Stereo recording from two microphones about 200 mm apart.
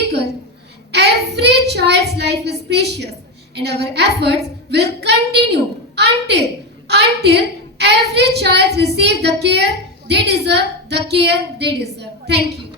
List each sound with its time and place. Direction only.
0.9 s a woman's voice: 55° right (ahead or behind)